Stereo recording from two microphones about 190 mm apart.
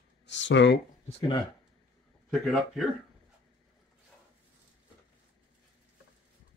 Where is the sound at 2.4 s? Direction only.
Centre (ahead or behind).